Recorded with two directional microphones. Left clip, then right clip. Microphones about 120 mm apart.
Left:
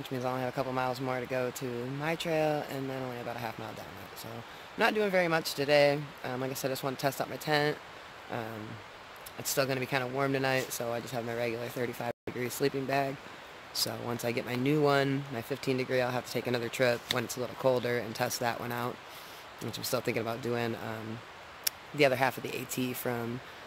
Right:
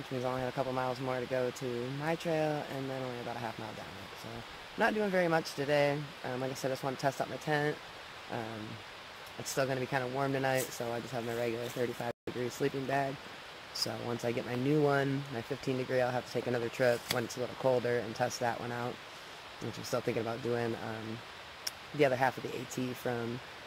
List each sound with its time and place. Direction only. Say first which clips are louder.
0.2 s speech: left 1 dB; 10° left (ahead or behind)
4.7 s speech: left 3 dB; 10° left (ahead or behind)
9.6 s speech: left 2 dB; 10° left (ahead or behind)
19.9 s speech: left 2 dB; 10° left (ahead or behind)
21.6 s a sound: left 3 dB; 10° left (ahead or behind)
22.8 s speech: left 3 dB; 15° left (ahead or behind)